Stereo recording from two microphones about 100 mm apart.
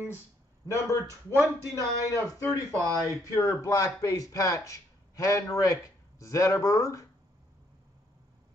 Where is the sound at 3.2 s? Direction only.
30° left (ahead or behind).